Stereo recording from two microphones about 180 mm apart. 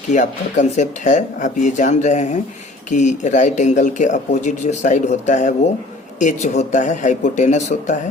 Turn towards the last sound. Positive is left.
turn(degrees=45)  # may be behind; listen again after turning